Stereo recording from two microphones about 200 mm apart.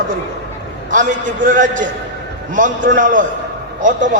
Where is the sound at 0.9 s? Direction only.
40° right (ahead or behind).